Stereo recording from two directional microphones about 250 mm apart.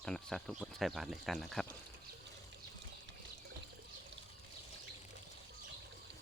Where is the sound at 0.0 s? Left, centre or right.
Centre.